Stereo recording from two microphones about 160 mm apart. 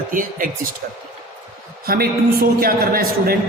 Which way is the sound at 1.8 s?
70° right (ahead or behind).